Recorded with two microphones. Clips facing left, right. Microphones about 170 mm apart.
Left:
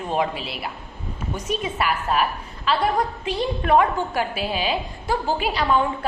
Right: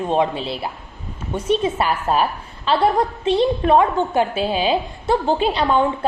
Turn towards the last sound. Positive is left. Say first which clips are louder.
# right 3 dB
turn(degrees=-25)  # may be behind; listen again after turning